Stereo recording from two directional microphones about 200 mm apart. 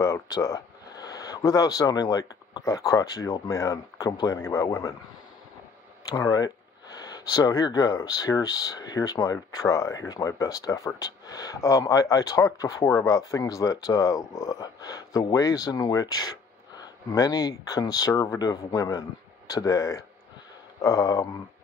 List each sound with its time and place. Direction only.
0.0 s speech: 15° left (ahead or behind)
6.0 s speech: 20° left (ahead or behind)